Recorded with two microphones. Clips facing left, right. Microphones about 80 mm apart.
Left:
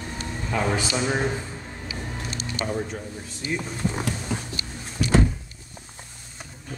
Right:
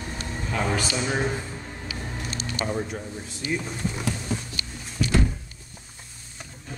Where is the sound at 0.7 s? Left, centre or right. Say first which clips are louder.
Left 2 dB; centre.